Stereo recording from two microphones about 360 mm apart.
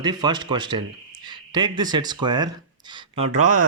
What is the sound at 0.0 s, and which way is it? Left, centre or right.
A man's voice, centre.